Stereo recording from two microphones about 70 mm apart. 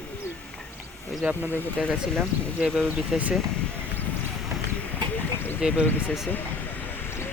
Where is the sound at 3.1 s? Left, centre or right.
Centre.